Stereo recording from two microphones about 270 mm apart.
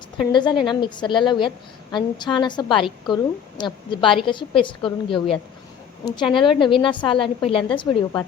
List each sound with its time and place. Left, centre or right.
0.3 s a woman's voice: centre